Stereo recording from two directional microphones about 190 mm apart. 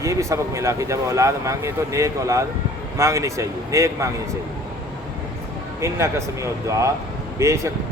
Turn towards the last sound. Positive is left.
turn(degrees=-15)  # may be behind; listen again after turning